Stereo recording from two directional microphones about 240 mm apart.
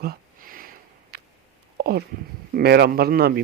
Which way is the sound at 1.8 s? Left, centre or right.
Right.